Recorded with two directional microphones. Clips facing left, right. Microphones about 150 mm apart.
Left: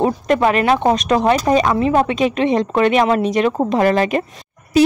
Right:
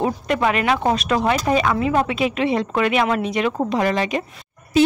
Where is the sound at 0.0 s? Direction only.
40° left (ahead or behind).